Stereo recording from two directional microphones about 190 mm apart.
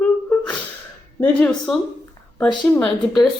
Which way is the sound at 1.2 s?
5° left (ahead or behind).